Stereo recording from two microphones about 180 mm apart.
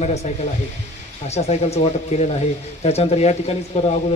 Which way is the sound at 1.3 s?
35° left (ahead or behind).